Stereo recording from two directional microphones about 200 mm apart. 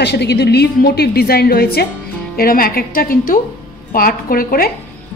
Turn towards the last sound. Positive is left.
turn(degrees=45)  # may be behind; listen again after turning